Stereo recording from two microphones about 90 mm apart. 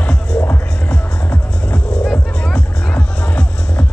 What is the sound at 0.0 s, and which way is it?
Music, 10° left (ahead or behind).